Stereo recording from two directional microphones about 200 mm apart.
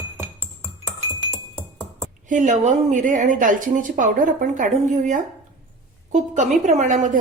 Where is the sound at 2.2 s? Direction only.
40° right (ahead or behind).